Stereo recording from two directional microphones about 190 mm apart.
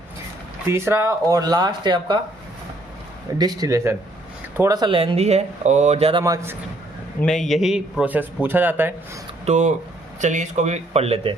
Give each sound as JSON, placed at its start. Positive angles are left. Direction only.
{"t": 0.7, "sound": "speech", "side_deg": -15}
{"t": 3.3, "sound": "speech", "side_deg": -20}
{"t": 6.2, "sound": "a man's voice", "side_deg": -15}
{"t": 7.2, "sound": "a man's voice", "side_deg": 0}
{"t": 9.5, "sound": "speech", "side_deg": -40}